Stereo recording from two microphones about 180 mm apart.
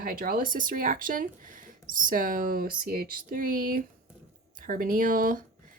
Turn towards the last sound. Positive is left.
turn(degrees=-50)  # may be behind; listen again after turning